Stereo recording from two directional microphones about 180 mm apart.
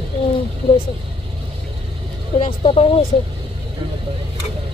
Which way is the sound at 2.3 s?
30° left (ahead or behind).